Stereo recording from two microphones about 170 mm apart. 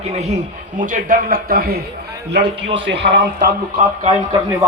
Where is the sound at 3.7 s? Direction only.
40° right (ahead or behind).